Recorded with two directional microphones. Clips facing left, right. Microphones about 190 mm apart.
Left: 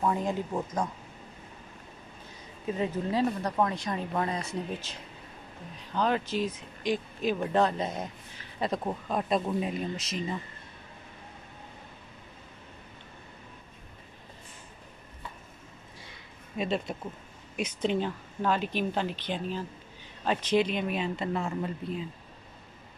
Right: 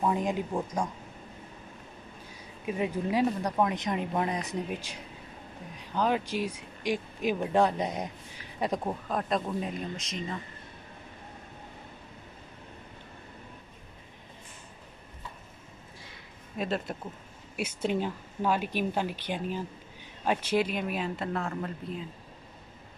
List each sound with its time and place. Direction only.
0.0 s speech: 15° right (ahead or behind)
2.6 s speech: 15° right (ahead or behind)
5.9 s speech: 10° right (ahead or behind)
9.1 s speech: 5° left (ahead or behind)
16.5 s speech: centre (ahead or behind)